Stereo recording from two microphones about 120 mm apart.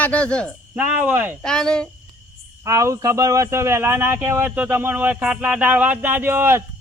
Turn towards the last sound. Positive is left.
turn(degrees=-20)  # may be behind; listen again after turning